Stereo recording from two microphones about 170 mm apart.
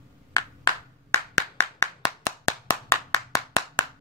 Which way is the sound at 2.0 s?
20° left (ahead or behind).